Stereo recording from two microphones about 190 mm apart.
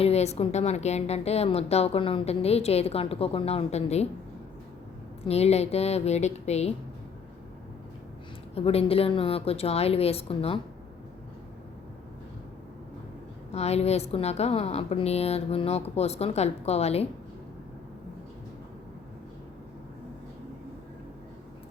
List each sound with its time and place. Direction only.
0.0 s a woman's voice: 35° left (ahead or behind)
5.2 s a woman's voice: 35° left (ahead or behind)
8.5 s a woman's voice: 30° left (ahead or behind)
13.5 s a woman's voice: 35° left (ahead or behind)